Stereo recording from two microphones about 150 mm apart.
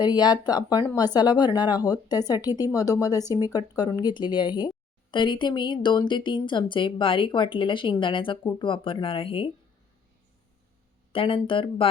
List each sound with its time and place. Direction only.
0.0 s a woman's voice: 25° left (ahead or behind)
11.1 s a woman's voice: 35° left (ahead or behind)